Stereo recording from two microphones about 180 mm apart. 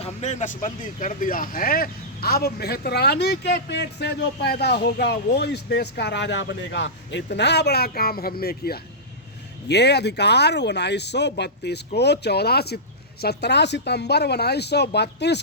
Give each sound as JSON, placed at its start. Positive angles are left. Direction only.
{"t": 0.0, "sound": "speech", "side_deg": 40}
{"t": 7.3, "sound": "speech", "side_deg": 70}